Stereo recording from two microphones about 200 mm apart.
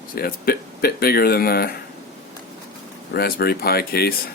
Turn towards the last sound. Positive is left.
turn(degrees=50)  # may be behind; listen again after turning